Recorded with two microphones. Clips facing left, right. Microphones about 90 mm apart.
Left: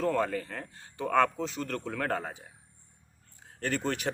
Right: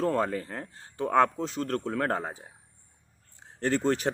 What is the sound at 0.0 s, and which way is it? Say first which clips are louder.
Speech: right 1 dB; 35° right (ahead or behind).